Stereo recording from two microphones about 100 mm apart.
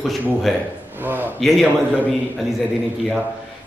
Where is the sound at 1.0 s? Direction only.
20° right (ahead or behind).